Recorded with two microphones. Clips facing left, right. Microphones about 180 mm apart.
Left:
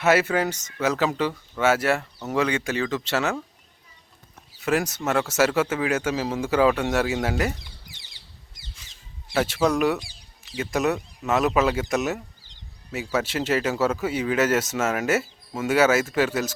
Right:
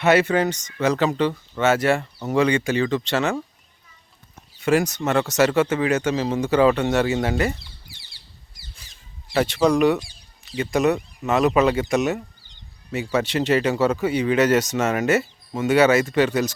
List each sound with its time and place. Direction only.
0.0 s speech: 5° left (ahead or behind)
4.4 s speech: centre (ahead or behind)
7.6 s chicken: 20° left (ahead or behind)
9.3 s speech: 5° left (ahead or behind)